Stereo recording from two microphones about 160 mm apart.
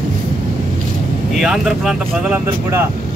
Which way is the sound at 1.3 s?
5° right (ahead or behind).